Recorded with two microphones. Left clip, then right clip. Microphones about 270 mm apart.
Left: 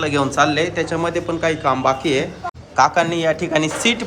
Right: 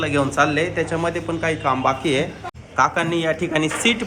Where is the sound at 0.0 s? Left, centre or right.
Centre.